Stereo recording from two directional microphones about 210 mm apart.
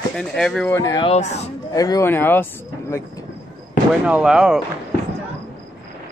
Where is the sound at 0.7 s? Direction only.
20° left (ahead or behind).